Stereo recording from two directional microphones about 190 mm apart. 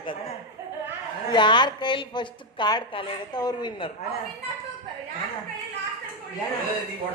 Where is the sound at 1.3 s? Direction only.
25° left (ahead or behind).